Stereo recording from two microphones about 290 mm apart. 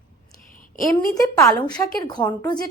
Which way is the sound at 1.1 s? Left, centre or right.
Centre.